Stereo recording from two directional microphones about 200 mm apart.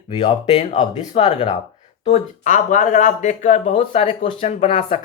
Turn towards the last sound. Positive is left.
turn(degrees=30)  # may be behind; listen again after turning